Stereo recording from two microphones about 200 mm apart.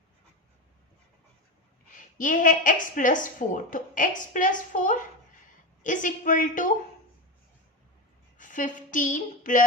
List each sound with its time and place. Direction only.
2.0 s a woman's voice: 40° left (ahead or behind)
8.4 s a woman's voice: 40° left (ahead or behind)